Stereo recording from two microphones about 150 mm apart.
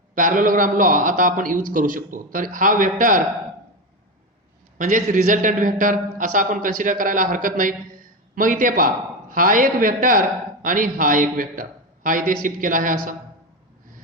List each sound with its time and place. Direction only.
0.1 s a man's voice: 65° right (ahead or behind)
4.8 s a man's voice: 60° right (ahead or behind)